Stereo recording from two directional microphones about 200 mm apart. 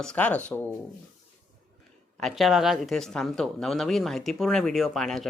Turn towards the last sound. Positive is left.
turn(degrees=0)  # may be behind; listen again after turning